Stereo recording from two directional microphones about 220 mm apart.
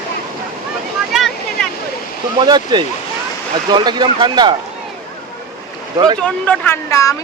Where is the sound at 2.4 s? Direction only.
20° right (ahead or behind).